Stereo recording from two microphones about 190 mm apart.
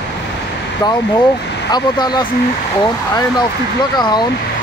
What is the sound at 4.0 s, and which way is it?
Speech, 20° left (ahead or behind).